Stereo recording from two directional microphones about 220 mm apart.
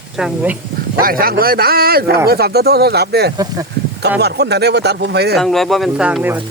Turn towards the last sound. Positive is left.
turn(degrees=-5)  # may be behind; listen again after turning